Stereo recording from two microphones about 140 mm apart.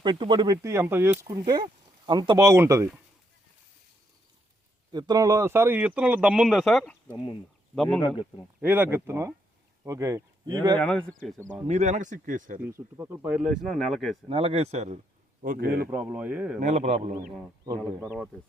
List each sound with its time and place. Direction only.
0.0 s speech: 35° right (ahead or behind)
4.9 s speech: 30° right (ahead or behind); by 8.0 s 5° left (ahead or behind)
8.0 s speech: 35° left (ahead or behind)
8.6 s speech: 15° right (ahead or behind)
10.8 s speech: 5° left (ahead or behind)
11.7 s speech: 60° right (ahead or behind)
12.6 s speech: 15° right (ahead or behind)
14.3 s speech: 40° right (ahead or behind)
15.4 s speech: 90° right
15.9 s speech: 10° right (ahead or behind)
16.6 s speech: 55° right (ahead or behind)